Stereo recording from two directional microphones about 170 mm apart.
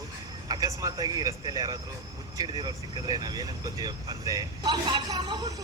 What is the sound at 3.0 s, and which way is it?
Speech, 25° right (ahead or behind).